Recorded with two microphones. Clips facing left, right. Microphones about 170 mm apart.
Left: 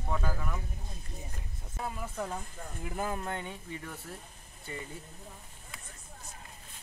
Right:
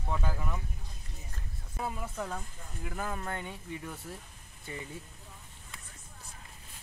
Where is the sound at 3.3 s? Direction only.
5° right (ahead or behind).